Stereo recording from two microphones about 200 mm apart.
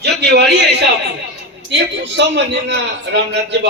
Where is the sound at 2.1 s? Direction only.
60° right (ahead or behind).